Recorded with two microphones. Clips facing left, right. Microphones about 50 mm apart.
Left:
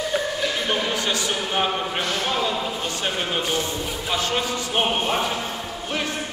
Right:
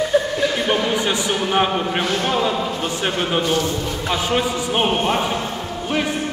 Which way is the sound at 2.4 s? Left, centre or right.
Centre.